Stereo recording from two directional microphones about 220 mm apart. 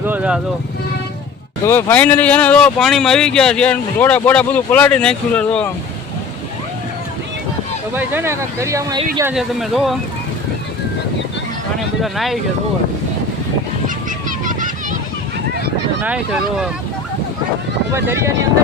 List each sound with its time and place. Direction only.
0.0 s speech: 5° right (ahead or behind)
1.6 s speech: 10° left (ahead or behind)
7.9 s speech: 10° right (ahead or behind)
9.3 s speech: centre (ahead or behind)
12.0 s speech: centre (ahead or behind)
13.8 s vehicle: 35° right (ahead or behind)
16.0 s speech: 5° right (ahead or behind)
17.9 s speech: 10° right (ahead or behind)